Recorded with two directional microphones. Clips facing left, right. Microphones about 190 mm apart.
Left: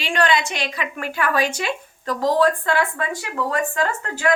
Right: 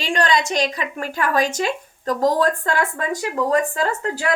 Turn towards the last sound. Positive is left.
turn(degrees=-35)  # may be behind; listen again after turning